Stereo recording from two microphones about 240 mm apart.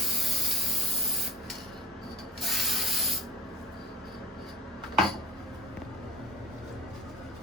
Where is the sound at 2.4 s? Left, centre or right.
Centre.